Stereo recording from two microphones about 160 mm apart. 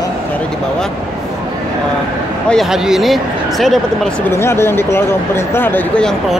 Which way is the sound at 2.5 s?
Centre (ahead or behind).